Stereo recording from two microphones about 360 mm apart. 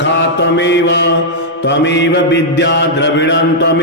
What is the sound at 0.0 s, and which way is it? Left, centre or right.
Mantra, left.